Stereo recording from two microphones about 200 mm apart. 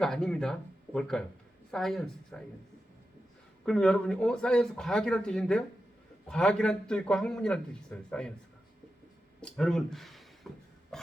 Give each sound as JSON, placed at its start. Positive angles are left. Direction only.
{"t": 0.0, "sound": "a man's voice", "side_deg": 5}
{"t": 3.7, "sound": "a man's voice", "side_deg": 5}
{"t": 9.4, "sound": "a sound", "side_deg": 0}
{"t": 10.9, "sound": "pig", "side_deg": 0}